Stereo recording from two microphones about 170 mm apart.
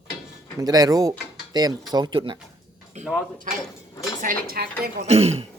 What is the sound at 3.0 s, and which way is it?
Speech, 40° right (ahead or behind).